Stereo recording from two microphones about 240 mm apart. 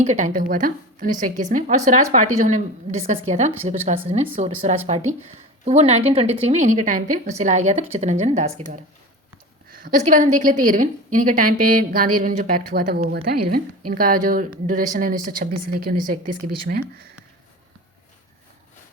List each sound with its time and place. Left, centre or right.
0.0 s a woman's voice: right
9.8 s speech: right